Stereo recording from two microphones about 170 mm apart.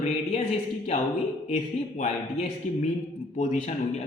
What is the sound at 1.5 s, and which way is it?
A man's voice, 40° left (ahead or behind).